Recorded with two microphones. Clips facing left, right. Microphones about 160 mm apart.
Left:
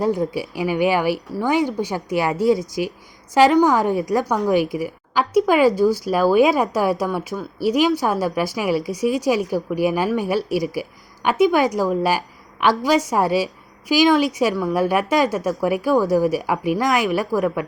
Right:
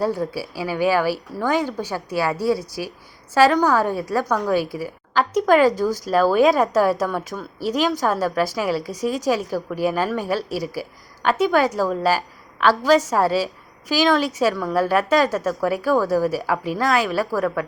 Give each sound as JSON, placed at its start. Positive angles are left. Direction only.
{"t": 0.0, "sound": "a woman's voice", "side_deg": 20}